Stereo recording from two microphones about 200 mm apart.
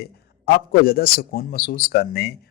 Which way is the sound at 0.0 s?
50° left (ahead or behind).